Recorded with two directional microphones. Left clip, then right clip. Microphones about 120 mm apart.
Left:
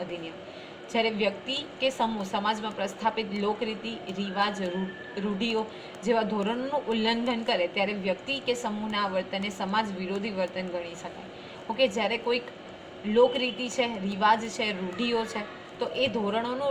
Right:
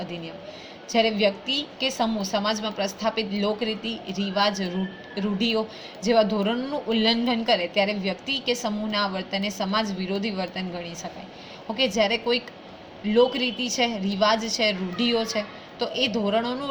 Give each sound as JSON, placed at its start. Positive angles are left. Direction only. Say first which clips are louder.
{"t": 0.9, "sound": "a woman's voice", "louder": "right 5 dB", "side_deg": -90}
{"t": 2.6, "sound": "a woman's voice", "louder": "right 3 dB", "side_deg": -90}
{"t": 11.9, "sound": "a woman's voice", "louder": "right 5 dB", "side_deg": -90}